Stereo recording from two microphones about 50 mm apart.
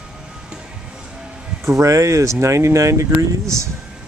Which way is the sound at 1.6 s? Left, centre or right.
Right.